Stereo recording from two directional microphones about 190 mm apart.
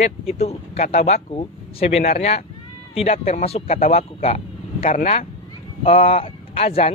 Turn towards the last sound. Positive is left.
turn(degrees=30)  # may be behind; listen again after turning